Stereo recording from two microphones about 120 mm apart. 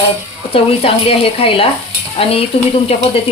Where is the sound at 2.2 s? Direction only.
55° left (ahead or behind).